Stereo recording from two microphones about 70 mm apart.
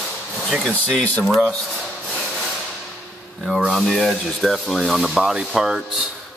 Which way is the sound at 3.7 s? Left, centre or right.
Centre.